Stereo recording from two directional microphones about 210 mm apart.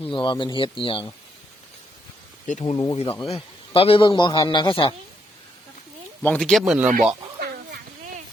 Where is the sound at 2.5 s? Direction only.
35° left (ahead or behind).